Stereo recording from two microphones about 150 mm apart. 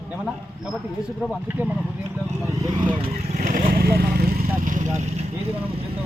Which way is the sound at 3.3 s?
65° right (ahead or behind).